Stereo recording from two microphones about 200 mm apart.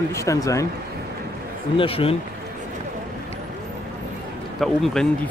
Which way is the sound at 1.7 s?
30° left (ahead or behind).